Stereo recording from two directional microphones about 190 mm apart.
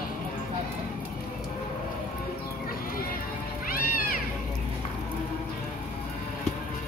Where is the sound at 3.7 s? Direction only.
50° left (ahead or behind).